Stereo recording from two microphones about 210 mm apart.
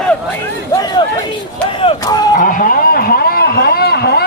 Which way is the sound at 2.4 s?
40° left (ahead or behind).